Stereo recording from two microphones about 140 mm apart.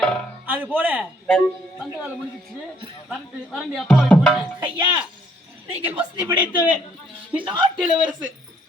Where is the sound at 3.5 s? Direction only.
5° left (ahead or behind).